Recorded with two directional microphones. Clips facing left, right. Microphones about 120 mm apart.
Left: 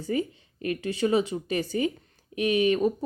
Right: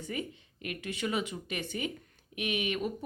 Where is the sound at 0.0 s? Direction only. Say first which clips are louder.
Left 9 dB; 35° left (ahead or behind).